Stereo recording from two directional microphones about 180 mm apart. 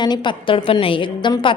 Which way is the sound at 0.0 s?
25° left (ahead or behind).